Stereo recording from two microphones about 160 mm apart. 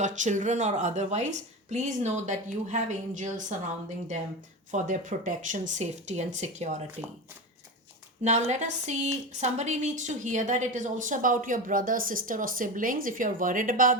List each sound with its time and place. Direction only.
0.0 s a woman's voice: 50° right (ahead or behind)
4.7 s a woman's voice: 50° right (ahead or behind)
8.2 s a woman's voice: 45° right (ahead or behind)